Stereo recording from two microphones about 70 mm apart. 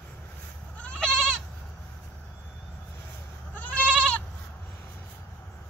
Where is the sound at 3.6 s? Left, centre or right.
Centre.